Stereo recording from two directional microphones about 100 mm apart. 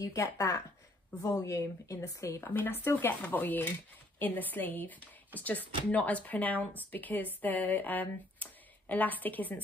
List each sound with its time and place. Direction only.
0.0 s speech: 35° left (ahead or behind); by 9.6 s 15° left (ahead or behind)